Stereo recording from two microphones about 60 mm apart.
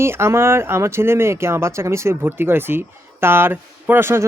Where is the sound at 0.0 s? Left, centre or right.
Right.